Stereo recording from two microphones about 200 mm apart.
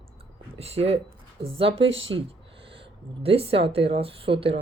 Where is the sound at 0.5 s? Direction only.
30° right (ahead or behind).